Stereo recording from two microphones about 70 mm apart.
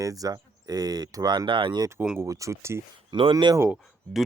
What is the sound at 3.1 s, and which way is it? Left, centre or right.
Speech, right.